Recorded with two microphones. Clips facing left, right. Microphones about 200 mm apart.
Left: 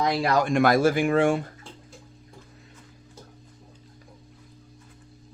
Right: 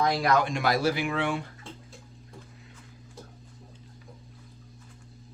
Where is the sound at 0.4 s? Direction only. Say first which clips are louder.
Left 6 dB; 50° left (ahead or behind).